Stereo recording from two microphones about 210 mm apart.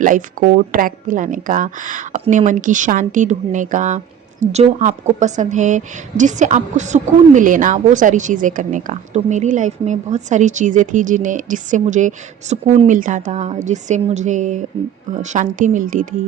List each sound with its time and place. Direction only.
0.0 s a woman's voice: 40° right (ahead or behind)